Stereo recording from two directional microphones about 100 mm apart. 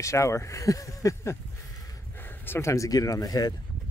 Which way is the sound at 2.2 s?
20° left (ahead or behind).